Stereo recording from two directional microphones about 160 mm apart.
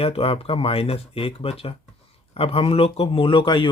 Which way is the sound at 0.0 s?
35° left (ahead or behind).